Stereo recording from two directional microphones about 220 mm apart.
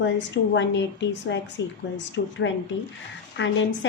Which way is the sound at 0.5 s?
55° left (ahead or behind).